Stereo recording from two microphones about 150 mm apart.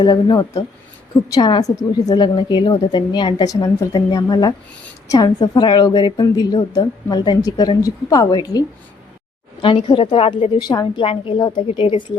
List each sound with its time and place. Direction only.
0.0 s a woman's voice: 25° left (ahead or behind)